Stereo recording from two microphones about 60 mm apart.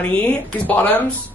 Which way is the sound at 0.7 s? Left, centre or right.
Left.